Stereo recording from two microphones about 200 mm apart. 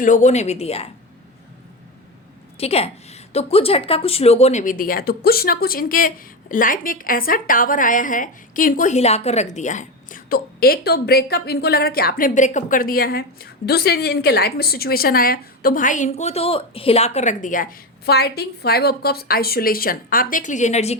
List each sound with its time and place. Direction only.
0.0 s a woman's voice: 35° left (ahead or behind)
2.6 s a woman's voice: 30° left (ahead or behind)